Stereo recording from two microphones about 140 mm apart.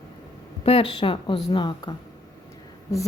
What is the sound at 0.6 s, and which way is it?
A woman's voice, 45° left (ahead or behind).